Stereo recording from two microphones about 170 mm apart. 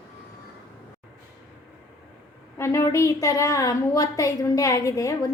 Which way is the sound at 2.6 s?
15° left (ahead or behind).